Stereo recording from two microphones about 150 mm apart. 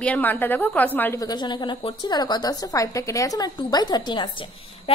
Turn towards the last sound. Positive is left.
turn(degrees=35)  # may be behind; listen again after turning